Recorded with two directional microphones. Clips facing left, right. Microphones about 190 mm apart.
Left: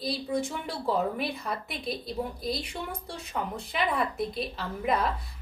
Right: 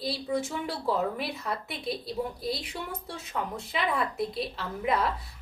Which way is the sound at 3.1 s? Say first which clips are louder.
Even; centre (ahead or behind).